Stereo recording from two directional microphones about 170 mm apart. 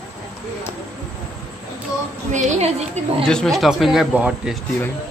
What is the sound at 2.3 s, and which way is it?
Speech, 45° right (ahead or behind).